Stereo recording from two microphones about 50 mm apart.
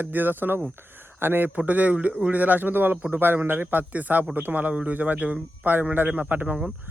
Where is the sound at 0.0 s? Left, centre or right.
Right.